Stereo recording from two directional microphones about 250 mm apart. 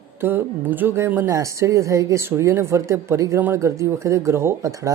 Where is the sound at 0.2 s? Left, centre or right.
Centre.